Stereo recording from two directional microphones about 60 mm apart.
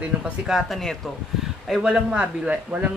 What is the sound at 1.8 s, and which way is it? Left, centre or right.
A man's voice, centre.